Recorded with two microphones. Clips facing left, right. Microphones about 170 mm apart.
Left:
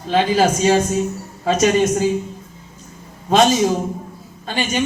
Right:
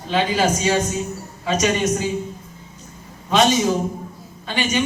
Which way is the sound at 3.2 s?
40° left (ahead or behind).